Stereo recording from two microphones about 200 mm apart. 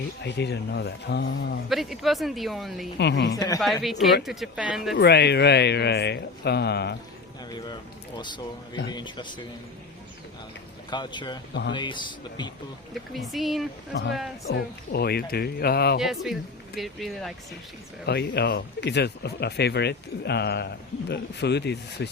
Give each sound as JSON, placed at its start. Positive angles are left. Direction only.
{"t": 0.2, "sound": "speech", "side_deg": 55}
{"t": 1.7, "sound": "speech", "side_deg": 0}
{"t": 3.0, "sound": "speech", "side_deg": 60}
{"t": 3.3, "sound": "speech", "side_deg": 15}
{"t": 3.6, "sound": "speech", "side_deg": 0}
{"t": 4.9, "sound": "speech", "side_deg": 55}
{"t": 7.5, "sound": "speech", "side_deg": 20}
{"t": 10.9, "sound": "speech", "side_deg": 20}
{"t": 12.9, "sound": "speech", "side_deg": 0}
{"t": 13.9, "sound": "speech", "side_deg": 60}
{"t": 16.0, "sound": "speech", "side_deg": 0}
{"t": 18.0, "sound": "speech", "side_deg": 55}